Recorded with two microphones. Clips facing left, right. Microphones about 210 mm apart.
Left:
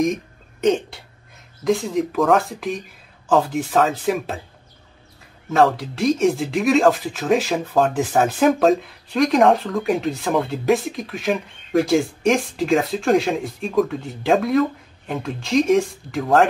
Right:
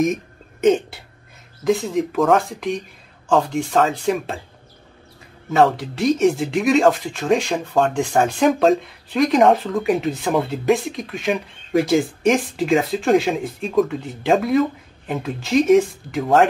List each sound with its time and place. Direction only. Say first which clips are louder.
0.0 s throat clearing: right 1 dB; 5° right (ahead or behind)
1.6 s speech: right 1 dB; centre (ahead or behind)
5.5 s speech: right 1 dB; centre (ahead or behind)